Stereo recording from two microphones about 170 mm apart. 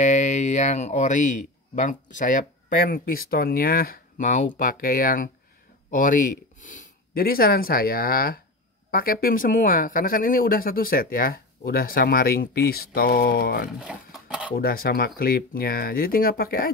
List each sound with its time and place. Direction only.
0.0 s speech: 45° left (ahead or behind); by 13.7 s 65° left (ahead or behind)
13.7 s speech: 5° right (ahead or behind)
14.5 s speech: 60° left (ahead or behind)